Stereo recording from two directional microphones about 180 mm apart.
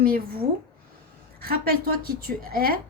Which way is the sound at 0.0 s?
55° right (ahead or behind).